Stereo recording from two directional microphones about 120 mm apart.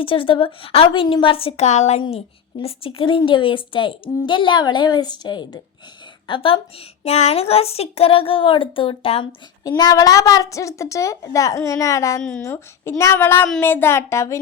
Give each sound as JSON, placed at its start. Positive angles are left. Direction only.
{"t": 0.0, "sound": "speech", "side_deg": 50}
{"t": 2.0, "sound": "a woman's voice", "side_deg": 55}
{"t": 6.2, "sound": "a woman's voice", "side_deg": 45}
{"t": 7.0, "sound": "speech", "side_deg": 65}
{"t": 9.6, "sound": "a woman's voice", "side_deg": 35}